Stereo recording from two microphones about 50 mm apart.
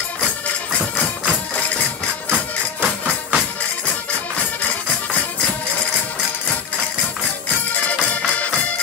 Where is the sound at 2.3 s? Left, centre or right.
Right.